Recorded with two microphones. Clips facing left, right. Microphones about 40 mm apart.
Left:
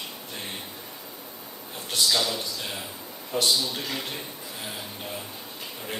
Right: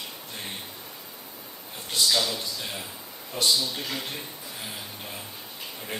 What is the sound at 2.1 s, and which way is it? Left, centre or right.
Speech, centre.